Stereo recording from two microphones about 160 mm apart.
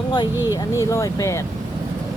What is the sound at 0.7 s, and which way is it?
Speech, 20° left (ahead or behind).